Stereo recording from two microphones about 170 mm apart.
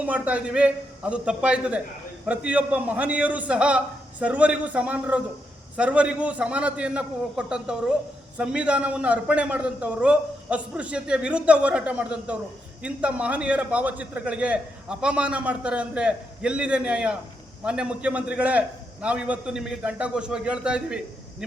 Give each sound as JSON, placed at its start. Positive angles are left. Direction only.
{"t": 0.0, "sound": "a man's voice", "side_deg": -10}